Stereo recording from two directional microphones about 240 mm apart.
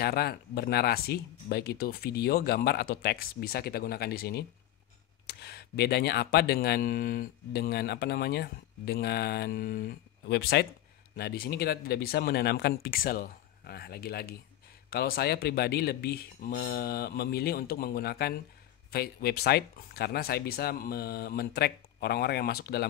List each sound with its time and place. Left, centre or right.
0.0 s speech: left